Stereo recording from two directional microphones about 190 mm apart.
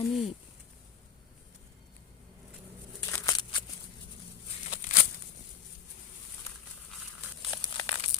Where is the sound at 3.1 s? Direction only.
15° left (ahead or behind).